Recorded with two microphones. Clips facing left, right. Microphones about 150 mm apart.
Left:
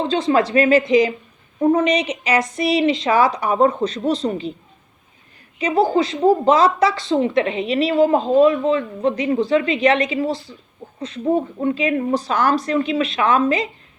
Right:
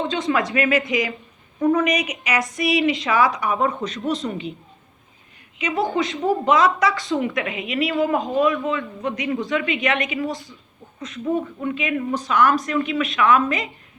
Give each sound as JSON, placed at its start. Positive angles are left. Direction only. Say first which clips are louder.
{"t": 0.0, "sound": "speech", "louder": "left 5 dB", "side_deg": 35}
{"t": 0.8, "sound": "a woman's voice", "louder": "left 8 dB", "side_deg": 25}
{"t": 5.5, "sound": "a woman's voice", "louder": "left 5 dB", "side_deg": 35}